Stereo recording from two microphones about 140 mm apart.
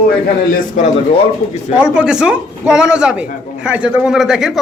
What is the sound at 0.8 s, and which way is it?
Speech, 60° left (ahead or behind).